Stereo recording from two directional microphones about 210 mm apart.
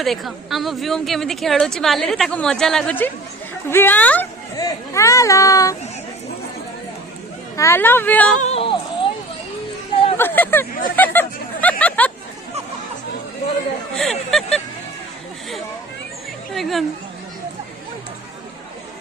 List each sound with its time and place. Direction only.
0.0 s a woman's voice: centre (ahead or behind); by 5.7 s 15° left (ahead or behind)
7.5 s speech: 15° left (ahead or behind)
8.4 s yodeling: 30° left (ahead or behind)
10.2 s hubbub: 10° left (ahead or behind)
13.9 s a woman's voice: centre (ahead or behind)
16.6 s a woman's voice: centre (ahead or behind)